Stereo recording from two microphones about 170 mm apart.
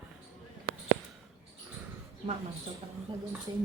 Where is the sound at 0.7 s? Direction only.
60° right (ahead or behind).